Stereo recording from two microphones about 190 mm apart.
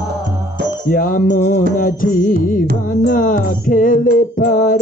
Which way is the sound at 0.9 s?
45° left (ahead or behind).